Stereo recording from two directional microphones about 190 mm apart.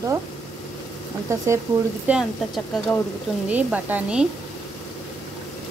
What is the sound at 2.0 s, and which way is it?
Dishes, centre (ahead or behind).